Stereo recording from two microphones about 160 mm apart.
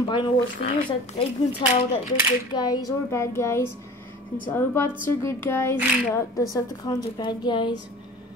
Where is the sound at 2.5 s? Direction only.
25° left (ahead or behind).